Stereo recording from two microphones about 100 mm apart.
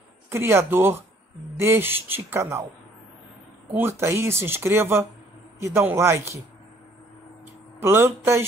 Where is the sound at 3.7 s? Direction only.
25° right (ahead or behind).